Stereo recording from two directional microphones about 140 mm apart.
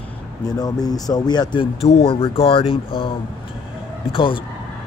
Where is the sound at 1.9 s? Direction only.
45° left (ahead or behind).